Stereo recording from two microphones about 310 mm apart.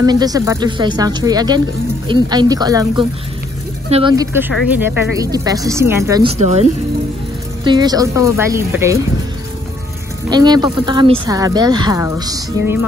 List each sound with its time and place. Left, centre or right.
0.0 s speech: centre
10.3 s speech: centre